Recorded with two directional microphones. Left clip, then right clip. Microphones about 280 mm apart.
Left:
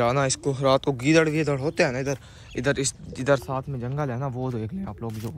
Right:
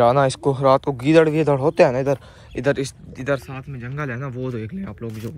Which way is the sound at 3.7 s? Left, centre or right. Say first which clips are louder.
Right 1 dB; left.